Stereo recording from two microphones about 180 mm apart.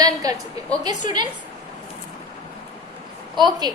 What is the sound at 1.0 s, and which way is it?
Speech, 25° right (ahead or behind).